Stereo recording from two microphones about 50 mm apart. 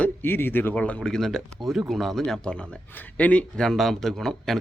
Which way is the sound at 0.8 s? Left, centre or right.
Centre.